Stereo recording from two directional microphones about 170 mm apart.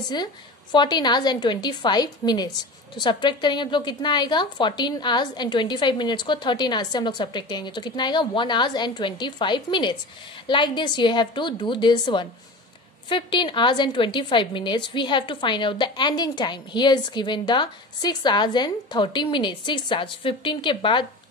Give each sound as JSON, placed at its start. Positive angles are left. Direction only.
{"t": 0.1, "sound": "a woman's voice", "side_deg": 25}